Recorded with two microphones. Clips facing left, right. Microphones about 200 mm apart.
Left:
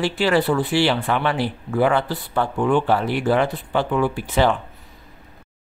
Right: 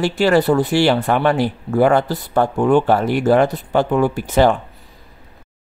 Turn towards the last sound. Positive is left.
turn(degrees=-45)  # may be behind; listen again after turning